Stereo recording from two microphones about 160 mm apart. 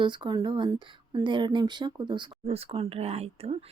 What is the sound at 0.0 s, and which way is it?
Speech, 30° right (ahead or behind).